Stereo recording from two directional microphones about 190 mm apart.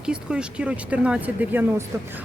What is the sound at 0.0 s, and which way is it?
Speech, 5° right (ahead or behind).